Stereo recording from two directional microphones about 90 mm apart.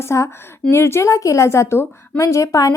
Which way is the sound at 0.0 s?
35° left (ahead or behind).